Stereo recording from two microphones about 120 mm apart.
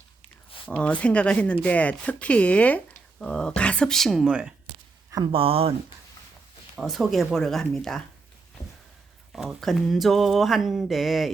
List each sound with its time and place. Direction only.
0.7 s speech: 10° left (ahead or behind); by 4.5 s 5° right (ahead or behind)
5.3 s speech: 50° right (ahead or behind)
6.7 s speech: centre (ahead or behind)
9.3 s speech: centre (ahead or behind)